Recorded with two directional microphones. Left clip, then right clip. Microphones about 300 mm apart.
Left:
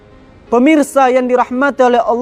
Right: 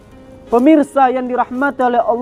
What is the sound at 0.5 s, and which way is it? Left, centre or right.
A man's voice, left.